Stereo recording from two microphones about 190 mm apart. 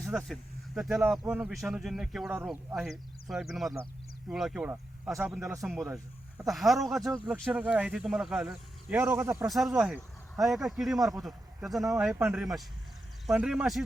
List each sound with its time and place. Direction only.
0.0 s speech: centre (ahead or behind)
2.7 s speech: centre (ahead or behind); by 5.6 s 15° right (ahead or behind)
5.6 s speech: centre (ahead or behind)
9.0 s speech: 15° right (ahead or behind)
9.5 s speech: centre (ahead or behind)